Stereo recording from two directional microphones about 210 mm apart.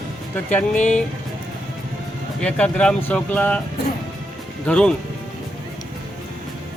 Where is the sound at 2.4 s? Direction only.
5° left (ahead or behind).